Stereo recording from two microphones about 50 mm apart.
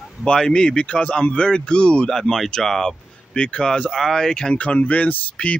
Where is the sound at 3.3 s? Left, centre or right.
Left.